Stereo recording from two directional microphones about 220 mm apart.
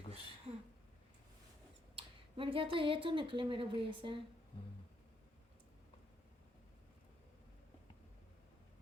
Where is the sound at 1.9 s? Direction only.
25° right (ahead or behind).